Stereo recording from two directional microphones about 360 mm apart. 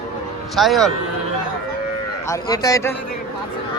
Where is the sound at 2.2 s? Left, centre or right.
Centre.